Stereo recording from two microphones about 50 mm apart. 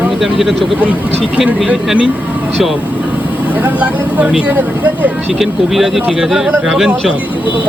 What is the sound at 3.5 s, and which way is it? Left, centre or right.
Speech, right.